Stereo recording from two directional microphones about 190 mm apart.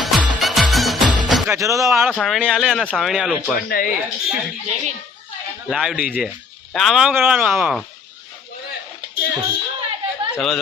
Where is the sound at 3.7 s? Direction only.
50° left (ahead or behind).